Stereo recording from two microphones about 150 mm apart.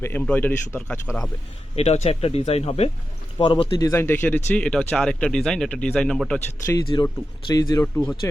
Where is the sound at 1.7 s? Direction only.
45° left (ahead or behind); by 6.4 s 5° left (ahead or behind).